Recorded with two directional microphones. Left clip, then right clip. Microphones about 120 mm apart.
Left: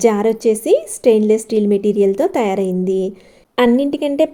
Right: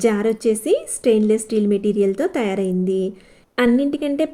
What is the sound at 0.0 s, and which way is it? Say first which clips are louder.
A woman's voice: left 4 dB; 35° left (ahead or behind).